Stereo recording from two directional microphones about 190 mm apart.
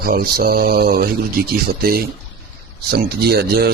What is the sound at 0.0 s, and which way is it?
Speech, 50° right (ahead or behind).